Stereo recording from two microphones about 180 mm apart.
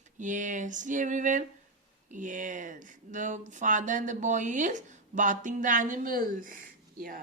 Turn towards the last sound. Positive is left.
turn(degrees=-50)  # may be behind; listen again after turning